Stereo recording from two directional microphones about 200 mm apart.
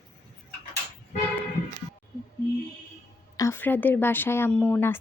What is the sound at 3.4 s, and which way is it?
Speech, 15° left (ahead or behind).